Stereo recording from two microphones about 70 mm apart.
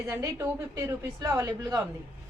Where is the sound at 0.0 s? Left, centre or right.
Right.